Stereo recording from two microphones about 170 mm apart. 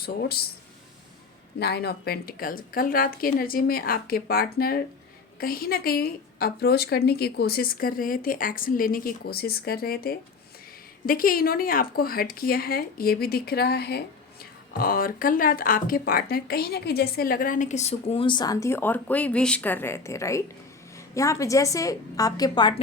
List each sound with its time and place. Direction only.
0.0 s a woman's voice: 65° left (ahead or behind)
1.5 s a woman's voice: 75° left (ahead or behind)
14.7 s a woman's voice: 60° left (ahead or behind); by 22.7 s 25° left (ahead or behind)